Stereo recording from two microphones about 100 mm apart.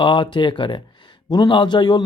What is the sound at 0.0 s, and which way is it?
Speech, 50° left (ahead or behind).